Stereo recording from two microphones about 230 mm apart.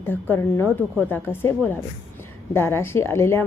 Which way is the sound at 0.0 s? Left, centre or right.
Centre.